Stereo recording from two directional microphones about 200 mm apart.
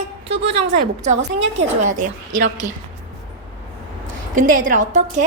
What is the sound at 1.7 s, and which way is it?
Speech, 40° right (ahead or behind).